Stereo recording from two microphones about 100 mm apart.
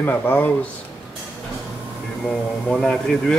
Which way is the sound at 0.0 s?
20° left (ahead or behind).